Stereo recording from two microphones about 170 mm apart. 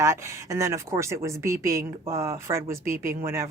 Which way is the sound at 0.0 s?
15° right (ahead or behind).